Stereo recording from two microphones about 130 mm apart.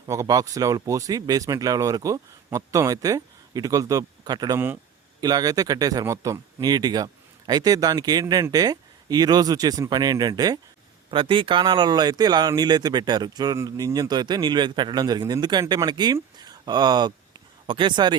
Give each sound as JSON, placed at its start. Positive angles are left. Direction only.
{"t": 0.0, "sound": "speech", "side_deg": -25}
{"t": 11.1, "sound": "speech", "side_deg": -40}